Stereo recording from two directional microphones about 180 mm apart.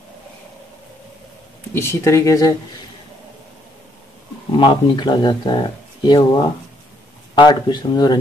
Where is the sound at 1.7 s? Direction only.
15° left (ahead or behind).